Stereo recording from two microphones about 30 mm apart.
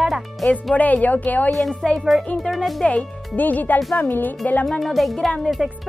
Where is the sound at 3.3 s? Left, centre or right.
Left.